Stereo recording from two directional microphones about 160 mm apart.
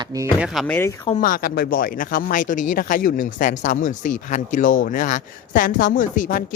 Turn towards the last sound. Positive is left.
turn(degrees=55)  # may be behind; listen again after turning